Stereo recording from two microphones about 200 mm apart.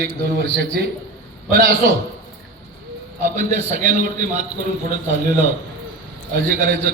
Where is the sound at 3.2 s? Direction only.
40° right (ahead or behind).